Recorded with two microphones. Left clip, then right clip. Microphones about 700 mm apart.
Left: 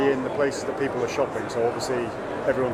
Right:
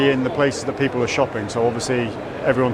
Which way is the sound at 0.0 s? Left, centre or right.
Right.